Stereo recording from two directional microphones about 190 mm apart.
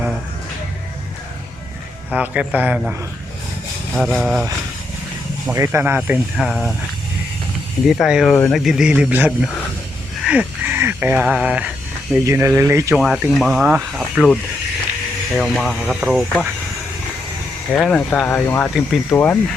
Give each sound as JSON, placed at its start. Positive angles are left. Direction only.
{"t": 2.1, "sound": "speech", "side_deg": -5}
{"t": 3.9, "sound": "speech", "side_deg": 0}
{"t": 5.5, "sound": "speech", "side_deg": -15}
{"t": 6.0, "sound": "speech", "side_deg": 0}
{"t": 7.9, "sound": "speech", "side_deg": 0}
{"t": 15.4, "sound": "speech", "side_deg": 0}
{"t": 17.7, "sound": "speech", "side_deg": 5}